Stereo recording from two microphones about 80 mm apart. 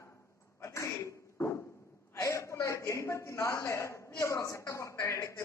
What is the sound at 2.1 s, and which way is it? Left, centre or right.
A man's voice, left.